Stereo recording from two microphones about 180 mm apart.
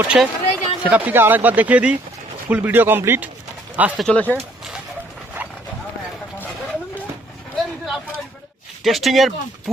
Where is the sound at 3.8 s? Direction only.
Centre (ahead or behind).